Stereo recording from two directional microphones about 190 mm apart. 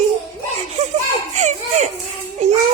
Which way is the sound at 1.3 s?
35° right (ahead or behind).